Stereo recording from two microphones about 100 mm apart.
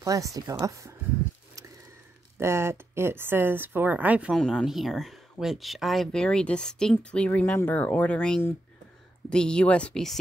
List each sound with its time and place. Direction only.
0.0 s speech: 35° right (ahead or behind)
2.3 s a woman's voice: 25° right (ahead or behind)
4.3 s speech: 5° left (ahead or behind)